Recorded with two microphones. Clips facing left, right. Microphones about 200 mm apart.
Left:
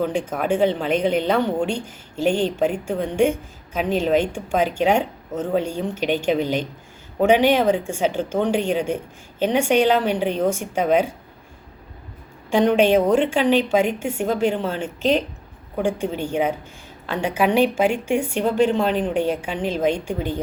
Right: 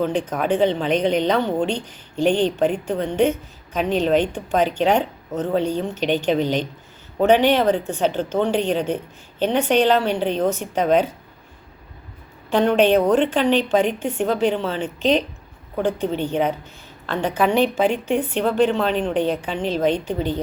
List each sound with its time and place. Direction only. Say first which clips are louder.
0.0 s speech: right 1 dB; 10° left (ahead or behind)
12.5 s speech: even; 10° left (ahead or behind)